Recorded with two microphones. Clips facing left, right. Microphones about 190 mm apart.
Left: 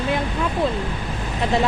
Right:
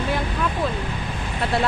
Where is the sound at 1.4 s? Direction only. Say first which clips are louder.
Left 2 dB; 15° left (ahead or behind).